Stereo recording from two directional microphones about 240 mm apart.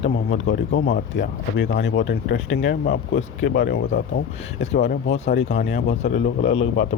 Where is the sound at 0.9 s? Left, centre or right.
Left.